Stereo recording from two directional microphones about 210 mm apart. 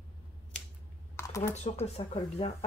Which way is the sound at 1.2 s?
10° left (ahead or behind).